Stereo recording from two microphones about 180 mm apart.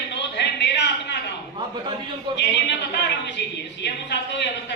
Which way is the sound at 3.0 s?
75° left (ahead or behind).